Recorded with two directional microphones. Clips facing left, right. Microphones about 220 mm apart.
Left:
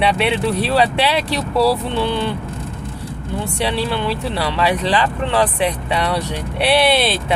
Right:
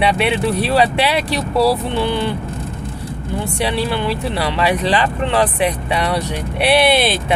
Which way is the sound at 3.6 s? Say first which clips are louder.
Right 1 dB; 10° right (ahead or behind).